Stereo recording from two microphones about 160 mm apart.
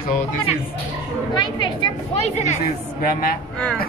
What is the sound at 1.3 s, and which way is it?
Speech, 25° left (ahead or behind).